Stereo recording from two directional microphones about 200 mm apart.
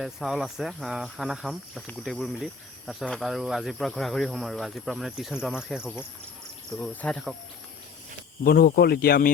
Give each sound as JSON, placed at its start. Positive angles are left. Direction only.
{"t": 0.0, "sound": "speech", "side_deg": 0}
{"t": 8.4, "sound": "speech", "side_deg": 50}